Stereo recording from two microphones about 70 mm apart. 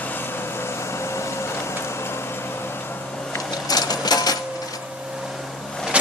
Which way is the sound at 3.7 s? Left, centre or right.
Left.